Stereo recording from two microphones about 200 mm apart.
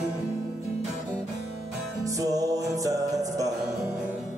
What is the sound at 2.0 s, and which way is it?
Music, 15° right (ahead or behind).